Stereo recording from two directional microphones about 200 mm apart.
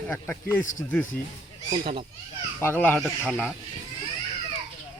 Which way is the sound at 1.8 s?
30° right (ahead or behind).